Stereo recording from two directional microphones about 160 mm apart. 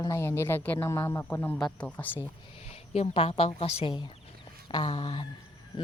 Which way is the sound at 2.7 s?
40° left (ahead or behind).